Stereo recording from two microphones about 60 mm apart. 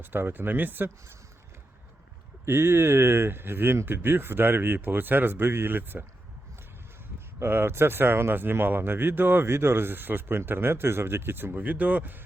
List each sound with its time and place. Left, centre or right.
0.0 s speech: right
2.4 s speech: right
7.3 s speech: right